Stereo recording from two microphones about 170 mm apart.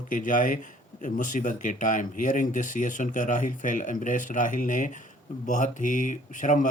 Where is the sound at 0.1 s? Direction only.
50° left (ahead or behind).